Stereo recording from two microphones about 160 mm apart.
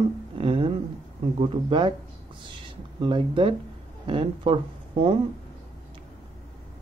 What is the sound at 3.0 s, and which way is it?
Speech, 30° right (ahead or behind).